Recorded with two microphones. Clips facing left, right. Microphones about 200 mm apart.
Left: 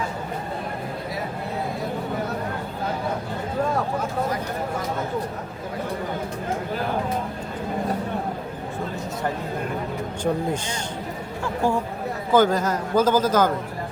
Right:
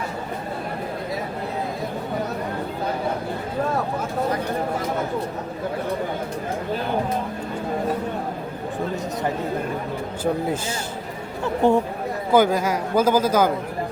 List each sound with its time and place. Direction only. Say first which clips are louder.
11.4 s speech: right 5 dB; 20° right (ahead or behind)
12.3 s a man's voice: right 1 dB; 10° right (ahead or behind)